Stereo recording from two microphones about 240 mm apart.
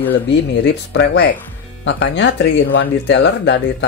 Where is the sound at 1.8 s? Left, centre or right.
Left.